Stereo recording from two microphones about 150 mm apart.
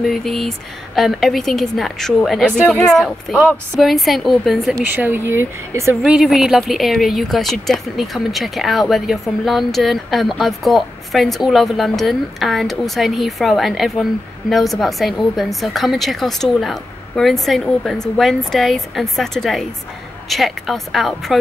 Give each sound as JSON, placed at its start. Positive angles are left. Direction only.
{"t": 0.0, "sound": "speech", "side_deg": 0}
{"t": 4.8, "sound": "speech", "side_deg": -15}
{"t": 6.0, "sound": "speech", "side_deg": -5}